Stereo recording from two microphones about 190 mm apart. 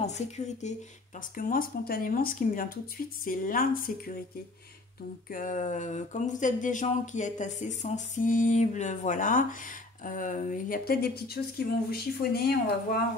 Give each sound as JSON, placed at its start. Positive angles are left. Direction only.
{"t": 0.0, "sound": "speech", "side_deg": 35}
{"t": 1.3, "sound": "speech", "side_deg": 50}
{"t": 5.3, "sound": "speech", "side_deg": 45}